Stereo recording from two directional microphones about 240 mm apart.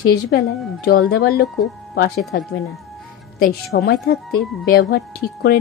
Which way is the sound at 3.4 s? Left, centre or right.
Left.